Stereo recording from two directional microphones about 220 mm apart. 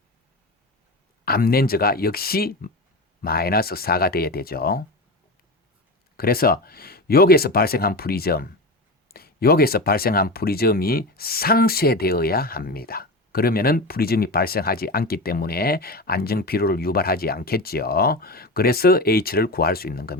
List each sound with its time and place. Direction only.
1.2 s speech: 45° left (ahead or behind)
6.1 s speech: 45° left (ahead or behind)